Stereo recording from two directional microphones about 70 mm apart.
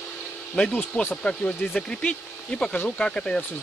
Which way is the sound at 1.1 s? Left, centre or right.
Centre.